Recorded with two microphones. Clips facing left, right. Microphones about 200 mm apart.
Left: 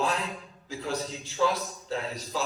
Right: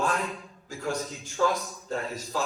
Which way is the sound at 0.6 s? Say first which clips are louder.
Right 1 dB; 50° right (ahead or behind).